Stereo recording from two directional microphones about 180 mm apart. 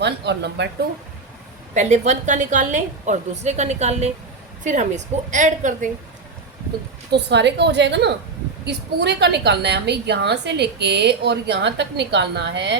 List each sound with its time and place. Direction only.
0.0 s a woman's voice: 70° right (ahead or behind)
1.7 s a woman's voice: 40° right (ahead or behind)
7.1 s a woman's voice: 70° right (ahead or behind)